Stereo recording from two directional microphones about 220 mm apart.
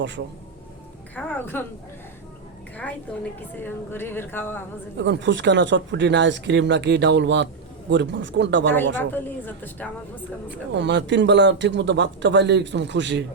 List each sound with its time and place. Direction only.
0.2 s speech: 55° right (ahead or behind)
1.1 s speech: 10° left (ahead or behind)
3.6 s speech: 10° left (ahead or behind)
4.9 s a man's voice: 55° right (ahead or behind)
8.7 s speech: 10° left (ahead or behind)
10.8 s a man's voice: 55° right (ahead or behind)